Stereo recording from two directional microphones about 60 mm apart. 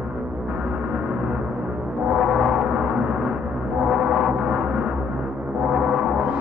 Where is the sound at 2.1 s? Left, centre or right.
Centre.